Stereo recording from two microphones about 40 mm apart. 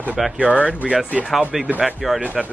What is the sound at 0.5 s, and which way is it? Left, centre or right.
Speech, left.